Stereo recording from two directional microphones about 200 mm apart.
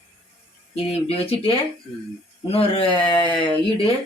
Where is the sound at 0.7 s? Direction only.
30° left (ahead or behind).